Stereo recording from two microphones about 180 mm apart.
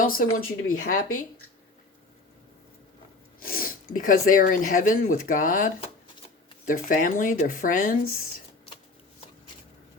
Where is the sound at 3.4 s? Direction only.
55° left (ahead or behind).